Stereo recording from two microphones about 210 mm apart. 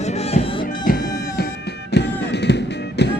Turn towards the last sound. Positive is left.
turn(degrees=55)  # may be behind; listen again after turning